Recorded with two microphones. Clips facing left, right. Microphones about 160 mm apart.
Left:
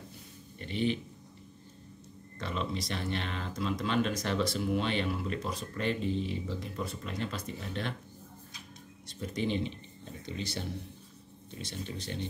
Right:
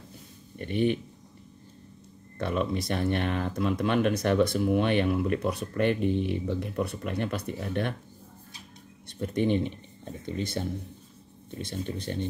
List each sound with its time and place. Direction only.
0.6 s speech: 55° right (ahead or behind)
2.3 s speech: 55° right (ahead or behind)
9.0 s a sound: 60° right (ahead or behind)
11.5 s speech: 55° right (ahead or behind)